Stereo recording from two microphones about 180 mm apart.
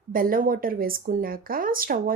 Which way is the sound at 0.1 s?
50° right (ahead or behind).